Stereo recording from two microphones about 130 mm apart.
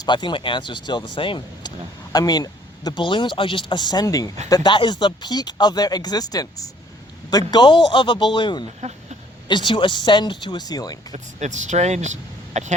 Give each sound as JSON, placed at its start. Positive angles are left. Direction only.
{"t": 0.0, "sound": "speech", "side_deg": 35}
{"t": 2.1, "sound": "speech", "side_deg": 30}
{"t": 8.8, "sound": "speech", "side_deg": -60}
{"t": 9.5, "sound": "speech", "side_deg": 35}
{"t": 11.1, "sound": "speech", "side_deg": -65}